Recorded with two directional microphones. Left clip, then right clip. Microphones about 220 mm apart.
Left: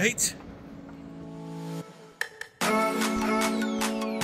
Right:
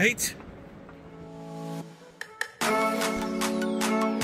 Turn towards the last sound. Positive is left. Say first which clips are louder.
# even
turn(degrees=0)  # may be behind; listen again after turning